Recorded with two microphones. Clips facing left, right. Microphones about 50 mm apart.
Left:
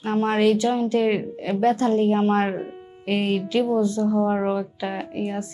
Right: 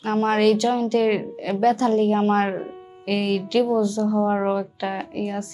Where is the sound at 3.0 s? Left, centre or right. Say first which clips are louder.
Even; left.